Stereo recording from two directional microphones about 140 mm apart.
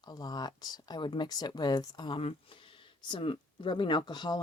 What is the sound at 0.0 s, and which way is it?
Speech, 30° left (ahead or behind).